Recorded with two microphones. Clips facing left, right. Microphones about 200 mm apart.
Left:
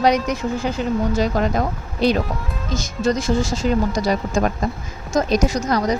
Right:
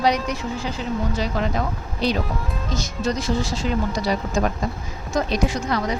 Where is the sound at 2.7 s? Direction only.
50° left (ahead or behind).